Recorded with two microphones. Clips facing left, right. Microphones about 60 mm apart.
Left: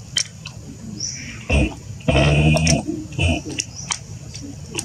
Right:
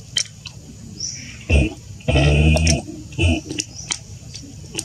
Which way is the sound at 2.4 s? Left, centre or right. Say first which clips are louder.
Left 1 dB; centre.